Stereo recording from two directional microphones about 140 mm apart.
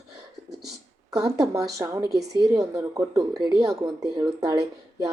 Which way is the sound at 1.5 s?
25° right (ahead or behind).